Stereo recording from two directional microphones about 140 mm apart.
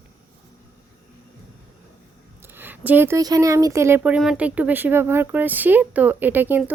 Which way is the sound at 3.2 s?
25° right (ahead or behind).